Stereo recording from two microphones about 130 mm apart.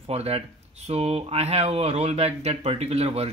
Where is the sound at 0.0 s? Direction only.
50° right (ahead or behind).